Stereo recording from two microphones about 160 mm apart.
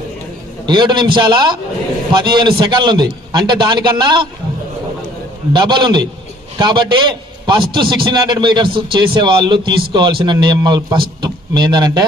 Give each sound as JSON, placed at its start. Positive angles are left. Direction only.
{"t": 0.7, "sound": "a man's voice", "side_deg": -30}
{"t": 5.5, "sound": "a man's voice", "side_deg": -30}